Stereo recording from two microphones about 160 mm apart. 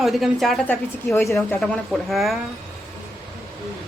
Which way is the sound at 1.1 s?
20° left (ahead or behind).